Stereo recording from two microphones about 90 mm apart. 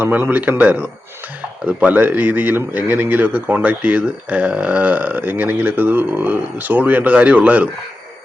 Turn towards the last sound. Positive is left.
turn(degrees=-15)  # may be behind; listen again after turning